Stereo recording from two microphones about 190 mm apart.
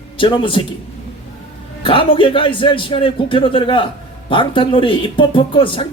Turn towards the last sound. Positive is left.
turn(degrees=25)  # may be behind; listen again after turning